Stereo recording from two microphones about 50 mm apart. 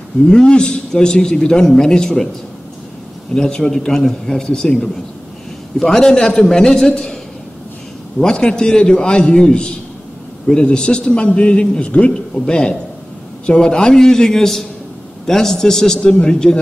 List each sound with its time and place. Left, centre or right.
0.2 s a man's voice: centre
3.3 s a man's voice: centre
8.2 s a man's voice: centre